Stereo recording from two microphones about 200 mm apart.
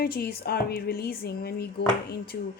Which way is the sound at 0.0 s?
50° left (ahead or behind).